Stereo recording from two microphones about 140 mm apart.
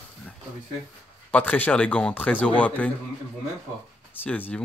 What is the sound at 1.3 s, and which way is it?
Speech, 10° left (ahead or behind).